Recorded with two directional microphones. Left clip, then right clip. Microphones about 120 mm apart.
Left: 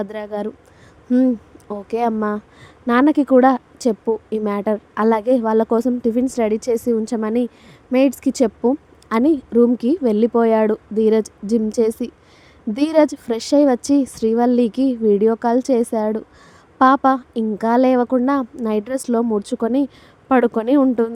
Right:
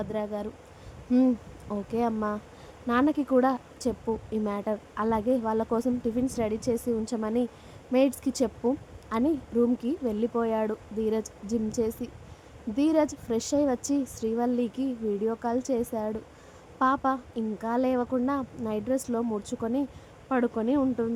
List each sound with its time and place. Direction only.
0.0 s speech: 35° left (ahead or behind)
1.1 s a sound: 20° left (ahead or behind)
1.7 s a woman's voice: 40° left (ahead or behind); by 20.8 s 60° left (ahead or behind)